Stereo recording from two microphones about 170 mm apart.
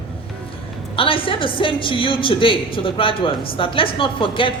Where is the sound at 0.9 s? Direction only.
30° left (ahead or behind).